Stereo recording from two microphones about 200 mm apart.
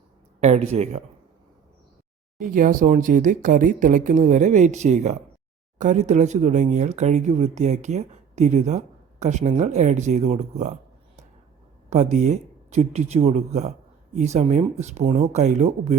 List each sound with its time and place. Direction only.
0.3 s speech: 35° right (ahead or behind)
2.4 s speech: 40° right (ahead or behind)
11.9 s speech: 35° right (ahead or behind)